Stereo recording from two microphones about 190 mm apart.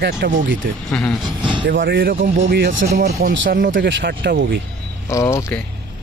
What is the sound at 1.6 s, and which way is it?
Speech, 50° right (ahead or behind).